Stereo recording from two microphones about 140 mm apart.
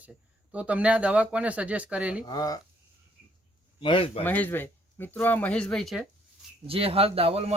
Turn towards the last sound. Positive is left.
turn(degrees=-45)  # may be behind; listen again after turning